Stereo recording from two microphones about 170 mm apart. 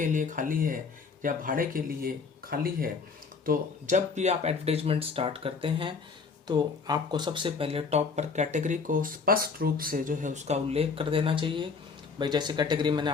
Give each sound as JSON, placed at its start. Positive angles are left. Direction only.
{"t": 0.0, "sound": "speech", "side_deg": -50}
{"t": 3.4, "sound": "speech", "side_deg": -50}